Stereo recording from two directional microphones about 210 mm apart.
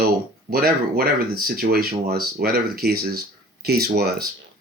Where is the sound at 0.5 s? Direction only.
45° right (ahead or behind).